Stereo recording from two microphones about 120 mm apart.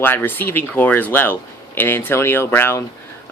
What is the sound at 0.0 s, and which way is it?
Speech, 15° left (ahead or behind).